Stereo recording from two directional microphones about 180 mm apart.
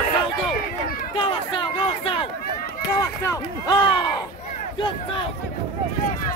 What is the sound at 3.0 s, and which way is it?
Speech, 20° left (ahead or behind).